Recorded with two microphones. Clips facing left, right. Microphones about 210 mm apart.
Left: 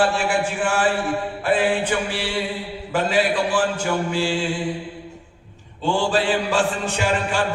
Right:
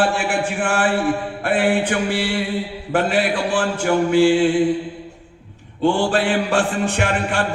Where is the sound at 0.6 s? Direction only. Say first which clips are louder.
Right 4 dB; 60° right (ahead or behind).